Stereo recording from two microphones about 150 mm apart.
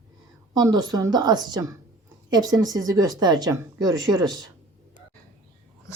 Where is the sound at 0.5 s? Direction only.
25° right (ahead or behind).